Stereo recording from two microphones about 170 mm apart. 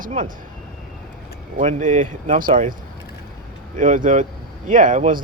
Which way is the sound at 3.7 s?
50° right (ahead or behind).